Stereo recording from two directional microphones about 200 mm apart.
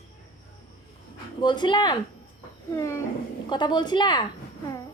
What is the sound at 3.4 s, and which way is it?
Speech, 20° left (ahead or behind).